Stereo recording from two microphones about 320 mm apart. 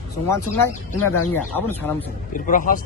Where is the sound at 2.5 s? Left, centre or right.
Left.